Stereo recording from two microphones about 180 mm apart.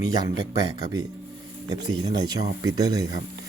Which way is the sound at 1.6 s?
20° right (ahead or behind).